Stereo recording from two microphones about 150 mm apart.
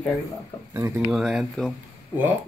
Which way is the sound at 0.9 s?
5° right (ahead or behind).